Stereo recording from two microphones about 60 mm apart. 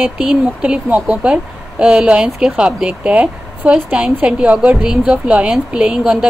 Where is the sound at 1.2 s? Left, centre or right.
Centre.